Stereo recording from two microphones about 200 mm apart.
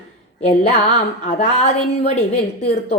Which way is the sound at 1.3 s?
35° left (ahead or behind).